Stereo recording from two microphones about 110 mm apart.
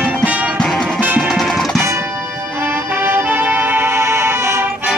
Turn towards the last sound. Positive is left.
turn(degrees=-20)  # may be behind; listen again after turning